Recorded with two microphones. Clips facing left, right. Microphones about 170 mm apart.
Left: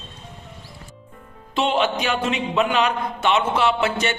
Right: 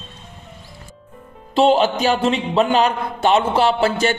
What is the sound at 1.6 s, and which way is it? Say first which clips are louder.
A man's voice: right 6 dB; 35° right (ahead or behind).